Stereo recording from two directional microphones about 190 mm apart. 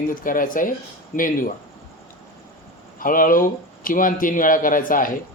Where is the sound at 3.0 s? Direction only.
45° left (ahead or behind).